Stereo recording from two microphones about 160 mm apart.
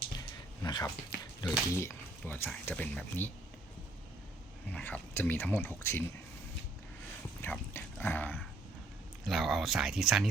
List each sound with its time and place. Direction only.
0.2 s a sound: 25° left (ahead or behind)
1.7 s speech: 15° left (ahead or behind)
4.7 s speech: 10° left (ahead or behind)
7.4 s speech: 15° left (ahead or behind)
9.2 s speech: centre (ahead or behind)